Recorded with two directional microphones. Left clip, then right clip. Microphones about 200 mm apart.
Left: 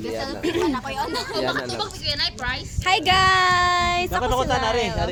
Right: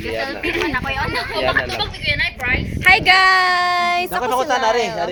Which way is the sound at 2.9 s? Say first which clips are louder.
Right 2 dB; 15° left (ahead or behind).